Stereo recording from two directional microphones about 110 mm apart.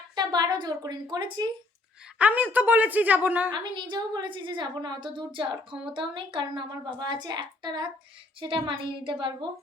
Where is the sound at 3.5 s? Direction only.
45° right (ahead or behind).